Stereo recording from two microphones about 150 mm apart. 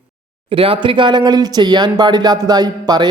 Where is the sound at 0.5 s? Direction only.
40° right (ahead or behind).